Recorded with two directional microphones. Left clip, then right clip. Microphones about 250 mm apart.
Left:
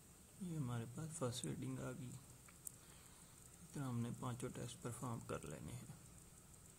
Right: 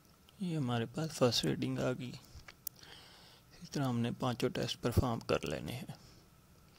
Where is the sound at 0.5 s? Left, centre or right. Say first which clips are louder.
Right 14 dB; right.